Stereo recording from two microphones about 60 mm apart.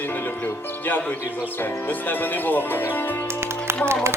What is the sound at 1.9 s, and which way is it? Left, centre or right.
Speech, left.